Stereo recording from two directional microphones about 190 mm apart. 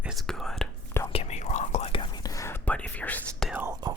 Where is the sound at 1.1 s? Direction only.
35° left (ahead or behind); by 3.5 s 5° left (ahead or behind).